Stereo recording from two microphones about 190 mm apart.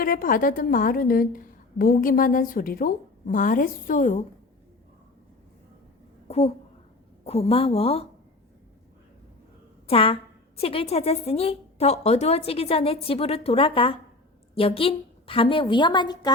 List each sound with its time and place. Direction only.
0.0 s a woman's voice: 50° left (ahead or behind)
6.2 s a woman's voice: 35° left (ahead or behind)
9.8 s a woman's voice: 30° left (ahead or behind)